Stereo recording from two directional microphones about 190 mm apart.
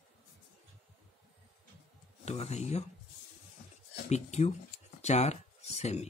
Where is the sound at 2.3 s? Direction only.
35° left (ahead or behind).